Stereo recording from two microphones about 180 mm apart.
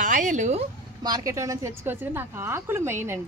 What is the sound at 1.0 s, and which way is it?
A woman's voice, 20° right (ahead or behind).